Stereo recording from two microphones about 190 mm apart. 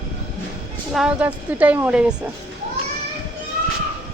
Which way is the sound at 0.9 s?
5° right (ahead or behind).